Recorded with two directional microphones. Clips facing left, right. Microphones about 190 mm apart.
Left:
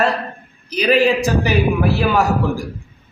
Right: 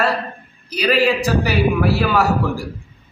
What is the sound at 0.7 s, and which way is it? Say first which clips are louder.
Speech: left 2 dB; 20° left (ahead or behind).